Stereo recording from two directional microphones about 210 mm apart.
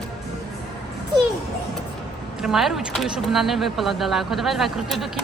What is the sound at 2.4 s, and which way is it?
Speech, centre (ahead or behind).